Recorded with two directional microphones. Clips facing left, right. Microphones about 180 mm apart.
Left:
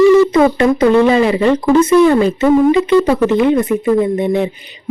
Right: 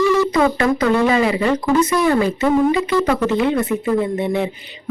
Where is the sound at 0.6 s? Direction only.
25° left (ahead or behind).